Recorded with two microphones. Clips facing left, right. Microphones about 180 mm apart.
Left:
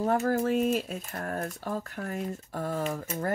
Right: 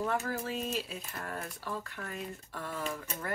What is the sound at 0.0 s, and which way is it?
Speech, 40° left (ahead or behind).